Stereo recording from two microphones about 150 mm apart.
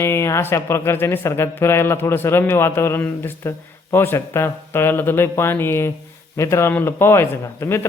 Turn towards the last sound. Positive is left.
turn(degrees=15)  # may be behind; listen again after turning